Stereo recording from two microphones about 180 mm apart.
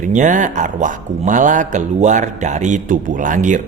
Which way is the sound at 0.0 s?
45° right (ahead or behind).